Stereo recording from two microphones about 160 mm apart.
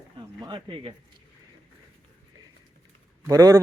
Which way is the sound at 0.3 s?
30° right (ahead or behind).